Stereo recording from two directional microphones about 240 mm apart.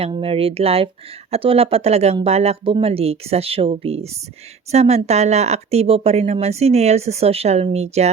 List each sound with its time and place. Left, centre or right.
0.0 s speech: right